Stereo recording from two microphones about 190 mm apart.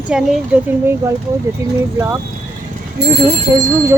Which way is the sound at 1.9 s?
15° right (ahead or behind).